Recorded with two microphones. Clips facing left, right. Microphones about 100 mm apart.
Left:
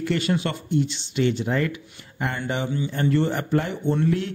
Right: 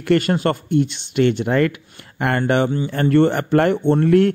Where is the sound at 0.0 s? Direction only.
55° right (ahead or behind).